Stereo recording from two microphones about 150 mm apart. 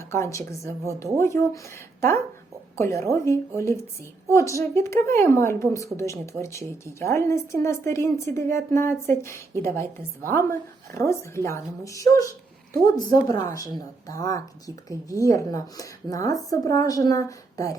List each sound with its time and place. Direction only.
0.1 s a woman's voice: 20° left (ahead or behind)